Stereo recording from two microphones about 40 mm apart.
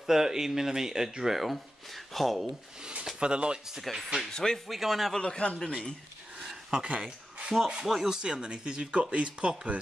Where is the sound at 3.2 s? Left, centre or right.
Right.